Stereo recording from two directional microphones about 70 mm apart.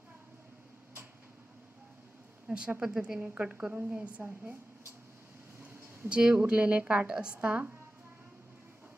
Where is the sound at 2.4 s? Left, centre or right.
Centre.